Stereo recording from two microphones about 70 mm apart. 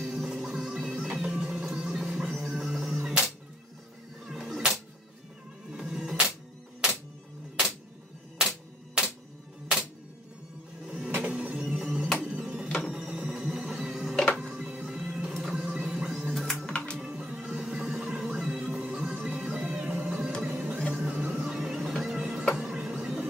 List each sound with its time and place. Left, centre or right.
0.0 s music: centre
4.3 s music: centre
8.4 s music: centre
11.2 s music: centre
12.3 s printer: centre
12.6 s printer: centre
12.9 s music: centre
14.1 s music: centre
14.4 s music: centre
16.3 s music: centre
16.6 s music: centre
17.0 s music: centre